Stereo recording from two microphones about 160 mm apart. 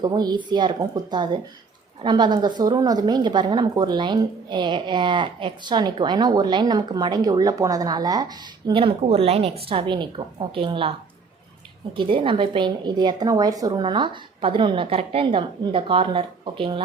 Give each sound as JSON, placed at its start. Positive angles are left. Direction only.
{"t": 0.0, "sound": "a woman's voice", "side_deg": -25}
{"t": 11.9, "sound": "a woman's voice", "side_deg": -30}